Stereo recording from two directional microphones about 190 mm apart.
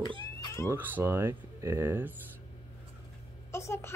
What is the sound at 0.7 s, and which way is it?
Speech, 10° right (ahead or behind).